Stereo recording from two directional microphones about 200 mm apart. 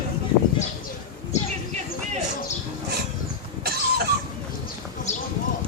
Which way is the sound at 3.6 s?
50° right (ahead or behind).